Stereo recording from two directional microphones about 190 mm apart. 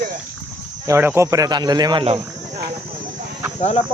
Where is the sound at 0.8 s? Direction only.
15° right (ahead or behind).